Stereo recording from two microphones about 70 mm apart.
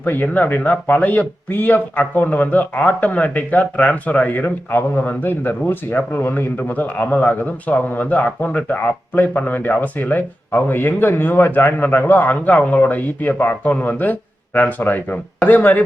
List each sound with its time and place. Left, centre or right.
0.0 s speech: left